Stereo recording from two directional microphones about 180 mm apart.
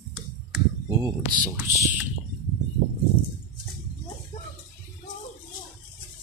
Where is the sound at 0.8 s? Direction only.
20° right (ahead or behind).